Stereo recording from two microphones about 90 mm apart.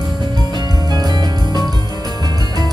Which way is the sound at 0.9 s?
50° right (ahead or behind).